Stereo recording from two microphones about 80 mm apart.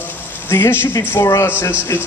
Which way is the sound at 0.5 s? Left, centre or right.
Left.